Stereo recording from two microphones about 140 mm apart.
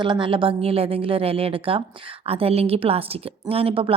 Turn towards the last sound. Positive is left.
turn(degrees=-40)  # may be behind; listen again after turning